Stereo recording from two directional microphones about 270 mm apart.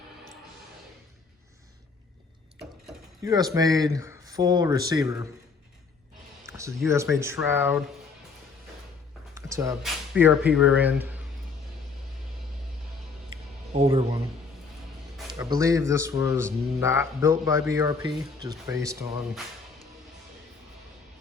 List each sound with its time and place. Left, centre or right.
3.2 s speech: centre
6.4 s a sound: centre
6.8 s speech: centre
9.3 s a sound: centre
9.8 s speech: centre
13.7 s speech: right
15.4 s speech: centre